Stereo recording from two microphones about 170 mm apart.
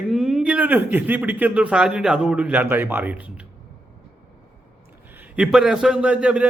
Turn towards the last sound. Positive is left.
turn(degrees=-5)  # may be behind; listen again after turning